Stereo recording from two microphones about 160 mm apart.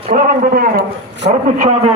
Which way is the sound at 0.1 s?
65° right (ahead or behind).